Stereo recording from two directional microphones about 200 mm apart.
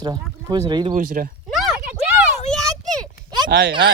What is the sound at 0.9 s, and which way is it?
Speech, 40° right (ahead or behind).